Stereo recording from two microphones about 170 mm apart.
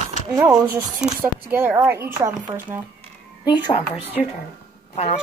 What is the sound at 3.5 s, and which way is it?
Speech, 35° left (ahead or behind).